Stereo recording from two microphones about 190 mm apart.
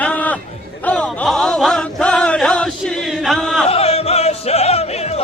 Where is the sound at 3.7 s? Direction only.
30° left (ahead or behind).